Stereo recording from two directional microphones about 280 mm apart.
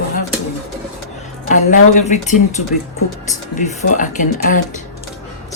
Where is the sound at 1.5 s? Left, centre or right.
Left.